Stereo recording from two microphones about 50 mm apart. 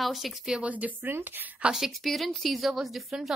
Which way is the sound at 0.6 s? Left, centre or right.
Right.